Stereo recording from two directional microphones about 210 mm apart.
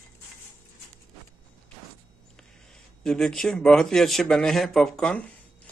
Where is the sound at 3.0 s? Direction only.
Centre (ahead or behind).